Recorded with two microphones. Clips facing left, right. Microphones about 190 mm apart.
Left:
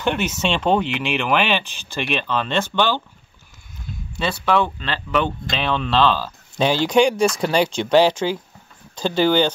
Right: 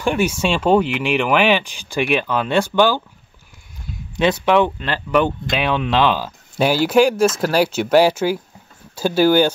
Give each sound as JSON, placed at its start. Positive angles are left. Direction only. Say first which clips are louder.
{"t": 0.0, "sound": "speech", "louder": "right 3 dB", "side_deg": -10}
{"t": 4.2, "sound": "speech", "louder": "right 5 dB", "side_deg": -15}